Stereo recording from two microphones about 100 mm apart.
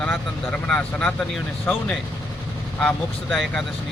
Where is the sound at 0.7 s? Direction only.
10° left (ahead or behind).